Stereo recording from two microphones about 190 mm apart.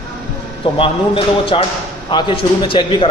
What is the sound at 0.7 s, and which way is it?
A man's voice, 30° left (ahead or behind).